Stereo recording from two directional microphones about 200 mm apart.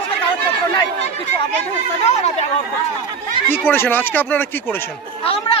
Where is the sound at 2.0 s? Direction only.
35° left (ahead or behind).